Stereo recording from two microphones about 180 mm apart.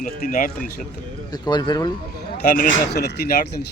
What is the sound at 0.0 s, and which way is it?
Speech, 50° left (ahead or behind).